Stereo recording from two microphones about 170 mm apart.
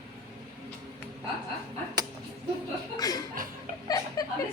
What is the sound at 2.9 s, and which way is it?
Chuckle, 20° left (ahead or behind).